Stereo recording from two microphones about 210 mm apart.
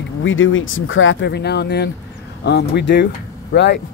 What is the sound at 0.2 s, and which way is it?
Speech, 70° left (ahead or behind).